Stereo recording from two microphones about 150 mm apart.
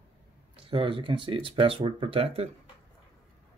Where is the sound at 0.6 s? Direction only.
35° right (ahead or behind).